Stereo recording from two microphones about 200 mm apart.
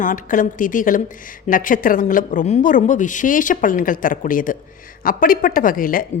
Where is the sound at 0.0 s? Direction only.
40° left (ahead or behind).